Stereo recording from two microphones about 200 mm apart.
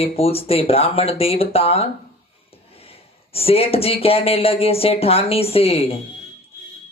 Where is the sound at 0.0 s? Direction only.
30° left (ahead or behind).